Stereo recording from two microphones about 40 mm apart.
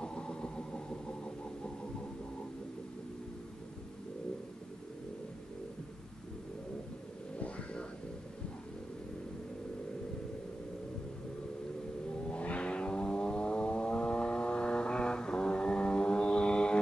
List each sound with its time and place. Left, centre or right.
0.0 s vehicle: left
7.3 s a sound: left
12.3 s vehicle: left